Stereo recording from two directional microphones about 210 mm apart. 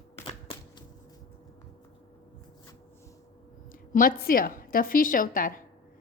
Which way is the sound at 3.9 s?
45° left (ahead or behind).